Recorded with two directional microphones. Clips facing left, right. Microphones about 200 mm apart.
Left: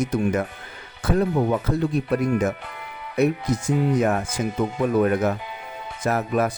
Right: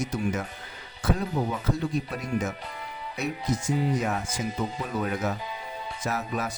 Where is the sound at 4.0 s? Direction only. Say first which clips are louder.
Left 7 dB; 55° left (ahead or behind).